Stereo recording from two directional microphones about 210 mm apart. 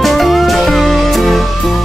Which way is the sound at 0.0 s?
Centre (ahead or behind).